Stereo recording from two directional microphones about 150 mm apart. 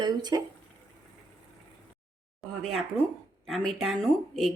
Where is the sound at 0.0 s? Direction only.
30° right (ahead or behind).